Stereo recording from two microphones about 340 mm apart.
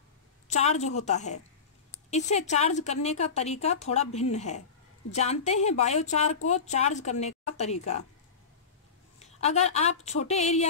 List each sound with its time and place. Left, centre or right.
0.5 s a woman's voice: centre
9.2 s a woman's voice: centre